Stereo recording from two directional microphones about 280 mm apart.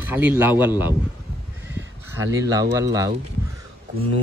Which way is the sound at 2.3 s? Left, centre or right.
Centre.